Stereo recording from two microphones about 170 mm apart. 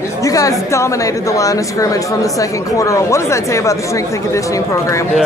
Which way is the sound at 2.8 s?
20° left (ahead or behind).